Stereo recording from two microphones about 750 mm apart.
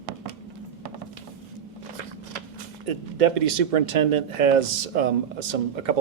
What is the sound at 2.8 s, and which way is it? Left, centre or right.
Speech, right.